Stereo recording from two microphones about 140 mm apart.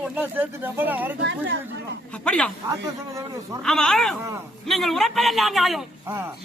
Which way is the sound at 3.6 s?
5° left (ahead or behind).